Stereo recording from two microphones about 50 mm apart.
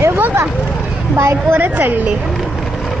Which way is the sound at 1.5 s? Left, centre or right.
Right.